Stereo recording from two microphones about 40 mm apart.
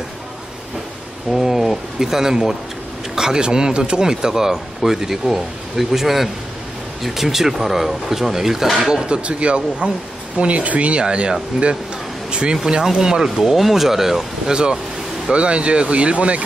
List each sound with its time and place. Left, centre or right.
1.3 s a sound: centre
2.0 s speech: centre
9.0 s speech: right; by 14.2 s centre
14.5 s speech: right